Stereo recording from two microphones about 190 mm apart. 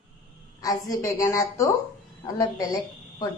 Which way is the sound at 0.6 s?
15° left (ahead or behind).